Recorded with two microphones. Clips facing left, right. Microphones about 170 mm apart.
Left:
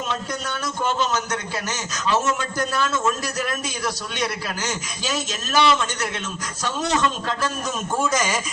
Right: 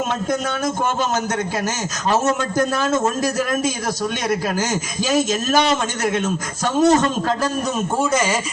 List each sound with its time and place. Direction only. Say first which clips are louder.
0.1 s a man's voice: right 6 dB; 50° right (ahead or behind)